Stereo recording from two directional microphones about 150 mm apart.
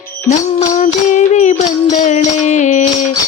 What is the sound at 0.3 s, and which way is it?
Music, 55° left (ahead or behind).